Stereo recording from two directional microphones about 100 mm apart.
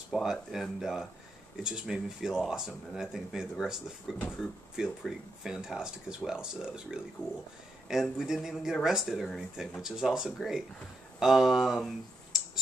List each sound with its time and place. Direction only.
0.1 s speech: 5° right (ahead or behind)
7.2 s speech: 10° left (ahead or behind)
7.9 s speech: 5° right (ahead or behind)